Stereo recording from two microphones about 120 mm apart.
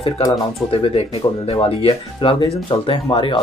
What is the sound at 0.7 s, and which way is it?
Speech, 55° left (ahead or behind).